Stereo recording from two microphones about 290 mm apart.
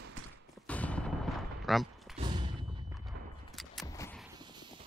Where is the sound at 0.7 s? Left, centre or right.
Centre.